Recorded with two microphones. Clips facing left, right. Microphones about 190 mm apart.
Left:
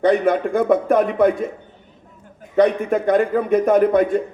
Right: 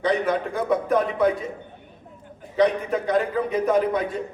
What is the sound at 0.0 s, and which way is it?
A man's voice, 50° left (ahead or behind).